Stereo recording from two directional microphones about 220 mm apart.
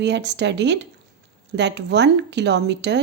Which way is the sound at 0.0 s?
50° right (ahead or behind).